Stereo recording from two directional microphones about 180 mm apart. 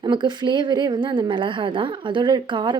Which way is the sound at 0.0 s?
25° right (ahead or behind).